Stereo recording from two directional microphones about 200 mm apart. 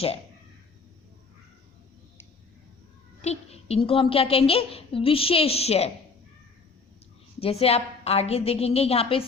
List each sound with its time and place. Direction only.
3.2 s a woman's voice: 30° left (ahead or behind)
7.3 s a woman's voice: 30° left (ahead or behind)